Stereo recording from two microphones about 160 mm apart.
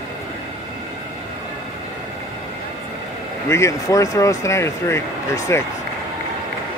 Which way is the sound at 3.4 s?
20° left (ahead or behind).